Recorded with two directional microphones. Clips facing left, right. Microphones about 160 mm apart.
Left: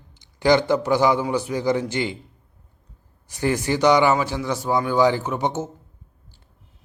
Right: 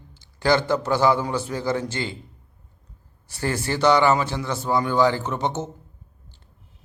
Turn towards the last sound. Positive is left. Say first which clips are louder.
# left 1 dB
turn(degrees=10)  # may be behind; listen again after turning